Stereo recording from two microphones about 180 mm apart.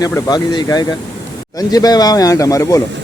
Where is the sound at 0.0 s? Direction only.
20° left (ahead or behind).